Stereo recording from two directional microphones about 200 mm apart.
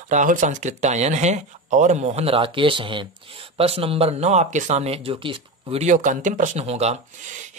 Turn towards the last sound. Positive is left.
turn(degrees=-35)  # may be behind; listen again after turning